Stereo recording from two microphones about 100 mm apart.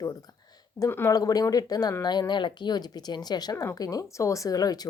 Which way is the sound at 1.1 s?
40° left (ahead or behind).